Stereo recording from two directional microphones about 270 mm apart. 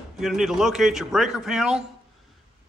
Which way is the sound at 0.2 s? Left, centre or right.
Centre.